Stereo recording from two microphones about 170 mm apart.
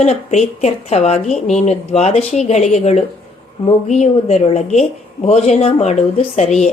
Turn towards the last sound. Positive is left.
turn(degrees=40)  # may be behind; listen again after turning